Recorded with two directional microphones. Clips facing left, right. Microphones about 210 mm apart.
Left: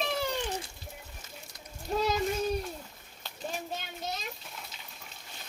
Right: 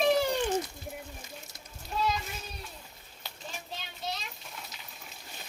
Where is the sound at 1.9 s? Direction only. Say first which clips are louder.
Left 4 dB; 40° left (ahead or behind).